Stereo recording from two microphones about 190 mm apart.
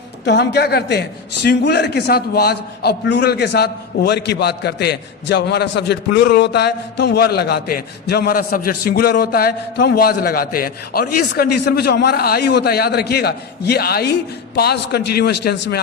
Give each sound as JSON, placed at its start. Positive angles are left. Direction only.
{"t": 0.3, "sound": "a man's voice", "side_deg": 60}